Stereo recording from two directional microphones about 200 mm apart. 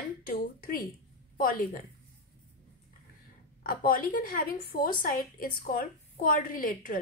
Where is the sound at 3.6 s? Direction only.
45° left (ahead or behind).